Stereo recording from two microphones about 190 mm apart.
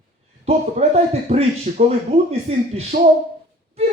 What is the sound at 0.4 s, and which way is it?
A man's voice, 35° right (ahead or behind).